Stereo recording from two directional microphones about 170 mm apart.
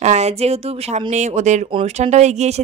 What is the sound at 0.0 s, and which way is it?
Speech, 40° right (ahead or behind).